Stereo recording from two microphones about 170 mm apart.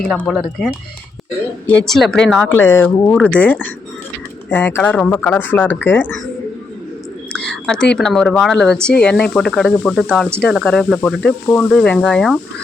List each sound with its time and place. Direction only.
0.2 s speech: centre (ahead or behind)
1.9 s speech: 5° left (ahead or behind)
7.3 s a sound: 5° left (ahead or behind)
7.9 s speech: centre (ahead or behind)